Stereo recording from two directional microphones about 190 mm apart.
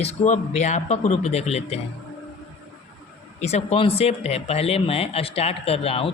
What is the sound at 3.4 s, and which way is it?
Speech, 35° left (ahead or behind).